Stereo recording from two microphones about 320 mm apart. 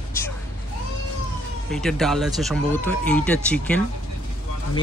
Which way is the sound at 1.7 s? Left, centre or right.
Centre.